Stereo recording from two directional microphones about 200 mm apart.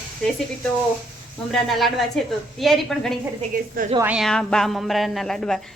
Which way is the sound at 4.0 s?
5° right (ahead or behind).